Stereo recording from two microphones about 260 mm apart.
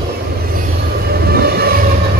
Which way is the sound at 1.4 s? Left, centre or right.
Right.